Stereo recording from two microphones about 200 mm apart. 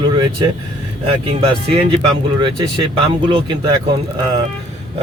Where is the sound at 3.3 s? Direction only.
25° right (ahead or behind).